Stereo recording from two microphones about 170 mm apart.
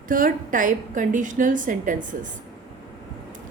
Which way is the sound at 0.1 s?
55° right (ahead or behind).